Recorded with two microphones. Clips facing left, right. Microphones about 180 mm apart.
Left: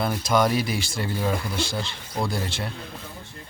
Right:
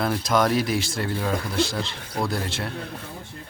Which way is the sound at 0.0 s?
Centre (ahead or behind).